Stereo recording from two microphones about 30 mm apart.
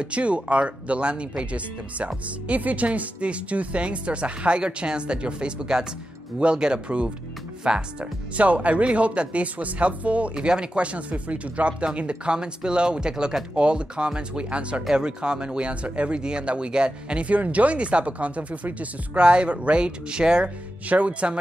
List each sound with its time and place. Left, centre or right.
0.0 s speech: right
8.4 s speech: right
9.4 s speech: right
10.4 s speech: right
10.8 s speech: right
16.2 s speech: right
17.3 s speech: right
20.9 s speech: right